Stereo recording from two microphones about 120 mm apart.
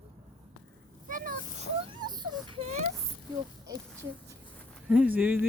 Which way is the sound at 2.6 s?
65° right (ahead or behind).